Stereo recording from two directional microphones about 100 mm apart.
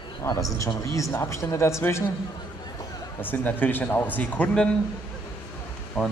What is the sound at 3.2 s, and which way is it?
Speech, 20° left (ahead or behind).